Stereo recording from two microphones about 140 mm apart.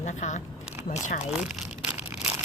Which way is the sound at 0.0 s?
60° left (ahead or behind).